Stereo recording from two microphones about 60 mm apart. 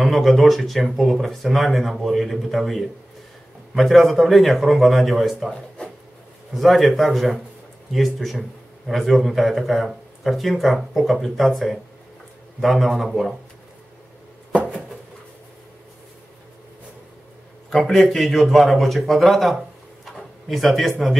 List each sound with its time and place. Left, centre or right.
0.0 s a man's voice: centre
6.5 s a man's voice: centre
14.5 s a sound: centre
17.6 s a man's voice: centre
20.2 s drawer open or close: centre